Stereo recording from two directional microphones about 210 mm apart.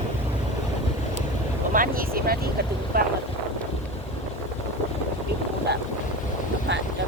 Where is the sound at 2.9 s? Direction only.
45° right (ahead or behind).